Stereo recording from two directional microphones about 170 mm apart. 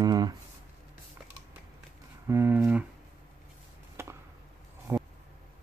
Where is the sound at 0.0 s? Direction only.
25° right (ahead or behind).